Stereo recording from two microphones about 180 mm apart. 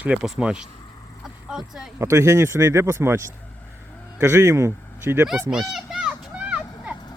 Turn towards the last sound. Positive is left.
turn(degrees=-5)  # may be behind; listen again after turning